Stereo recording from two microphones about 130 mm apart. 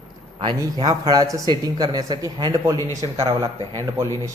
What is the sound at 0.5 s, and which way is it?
Speech, 30° right (ahead or behind).